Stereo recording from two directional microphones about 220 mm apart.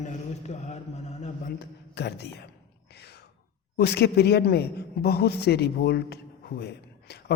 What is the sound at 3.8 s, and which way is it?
A man's voice, 50° left (ahead or behind).